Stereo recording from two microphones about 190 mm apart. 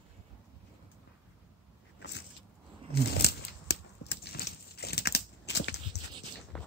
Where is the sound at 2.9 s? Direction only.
55° left (ahead or behind).